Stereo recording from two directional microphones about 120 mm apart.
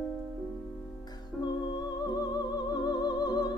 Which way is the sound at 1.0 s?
35° left (ahead or behind).